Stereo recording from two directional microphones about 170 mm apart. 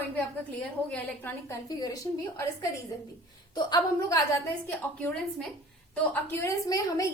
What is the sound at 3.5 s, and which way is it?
Speech, 25° left (ahead or behind).